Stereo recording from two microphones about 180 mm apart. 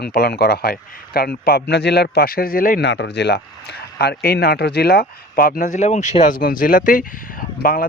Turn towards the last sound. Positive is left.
turn(degrees=55)  # may be behind; listen again after turning